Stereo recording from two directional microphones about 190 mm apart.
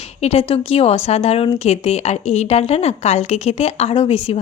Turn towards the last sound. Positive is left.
turn(degrees=30)  # may be behind; listen again after turning